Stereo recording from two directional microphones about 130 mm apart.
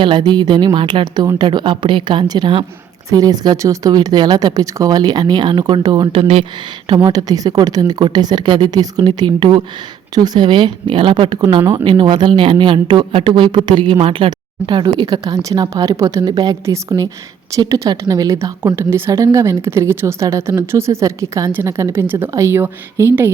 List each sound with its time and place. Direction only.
0.0 s speech: 35° right (ahead or behind)
6.8 s a woman's voice: 35° right (ahead or behind); by 23.3 s 20° right (ahead or behind)